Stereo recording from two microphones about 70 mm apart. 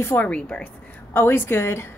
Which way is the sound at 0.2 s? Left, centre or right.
Centre.